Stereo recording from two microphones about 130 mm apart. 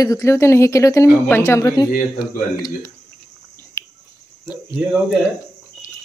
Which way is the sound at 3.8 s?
20° left (ahead or behind).